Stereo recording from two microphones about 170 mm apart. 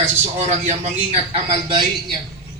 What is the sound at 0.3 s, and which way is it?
A man's voice, 40° right (ahead or behind).